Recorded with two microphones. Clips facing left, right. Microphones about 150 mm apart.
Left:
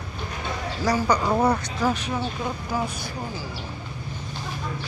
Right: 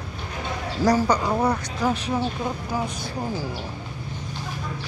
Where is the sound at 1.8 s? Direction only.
30° right (ahead or behind).